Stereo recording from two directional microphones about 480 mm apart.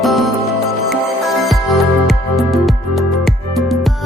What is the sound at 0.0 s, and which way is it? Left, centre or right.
Music, centre.